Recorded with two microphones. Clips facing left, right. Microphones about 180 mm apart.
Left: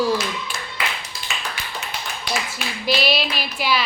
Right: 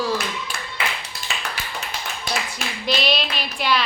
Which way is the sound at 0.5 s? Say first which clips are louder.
Left 1 dB; 60° right (ahead or behind).